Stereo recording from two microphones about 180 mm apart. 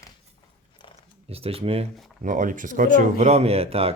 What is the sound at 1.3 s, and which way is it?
Speech, 35° right (ahead or behind).